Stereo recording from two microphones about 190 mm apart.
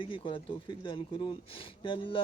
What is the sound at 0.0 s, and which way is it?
Speech, 25° left (ahead or behind).